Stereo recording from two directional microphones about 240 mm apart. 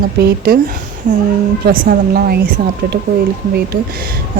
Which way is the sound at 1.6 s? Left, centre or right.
Right.